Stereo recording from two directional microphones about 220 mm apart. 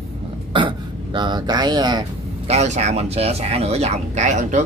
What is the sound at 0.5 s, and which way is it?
Speech, 20° right (ahead or behind).